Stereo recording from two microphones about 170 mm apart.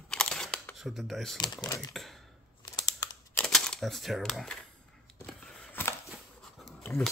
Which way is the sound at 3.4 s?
5° left (ahead or behind).